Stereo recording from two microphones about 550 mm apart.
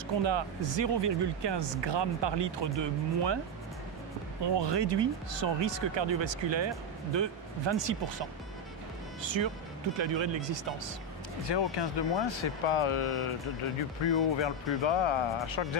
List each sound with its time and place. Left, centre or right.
0.2 s speech: right
4.6 s speech: right
11.4 s speech: left